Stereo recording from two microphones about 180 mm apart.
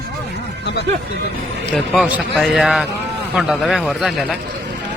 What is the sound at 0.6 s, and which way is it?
Speech, 75° left (ahead or behind).